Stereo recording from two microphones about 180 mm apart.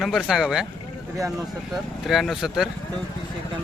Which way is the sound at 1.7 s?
Centre (ahead or behind).